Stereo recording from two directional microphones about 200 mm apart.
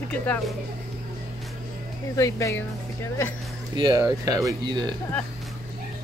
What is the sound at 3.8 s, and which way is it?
Speech, 20° right (ahead or behind).